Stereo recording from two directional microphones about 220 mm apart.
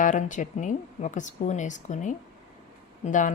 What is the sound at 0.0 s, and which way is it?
Speech, 35° left (ahead or behind).